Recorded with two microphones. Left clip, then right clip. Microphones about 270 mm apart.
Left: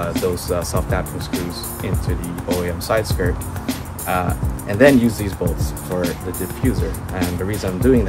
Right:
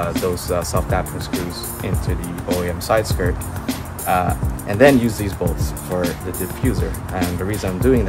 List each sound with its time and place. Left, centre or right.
0.0 s speech: centre